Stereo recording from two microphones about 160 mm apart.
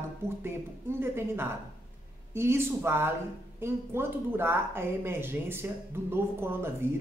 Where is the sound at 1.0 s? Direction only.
15° right (ahead or behind).